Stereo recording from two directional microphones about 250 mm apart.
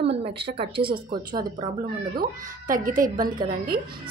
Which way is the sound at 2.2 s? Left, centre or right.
Right.